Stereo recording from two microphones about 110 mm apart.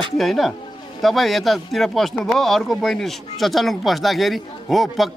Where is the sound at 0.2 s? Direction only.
Centre (ahead or behind).